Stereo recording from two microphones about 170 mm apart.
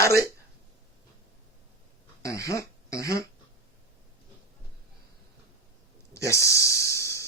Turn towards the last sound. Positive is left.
turn(degrees=15)  # may be behind; listen again after turning